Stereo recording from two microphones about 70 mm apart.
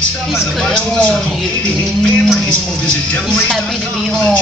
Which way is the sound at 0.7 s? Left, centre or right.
Centre.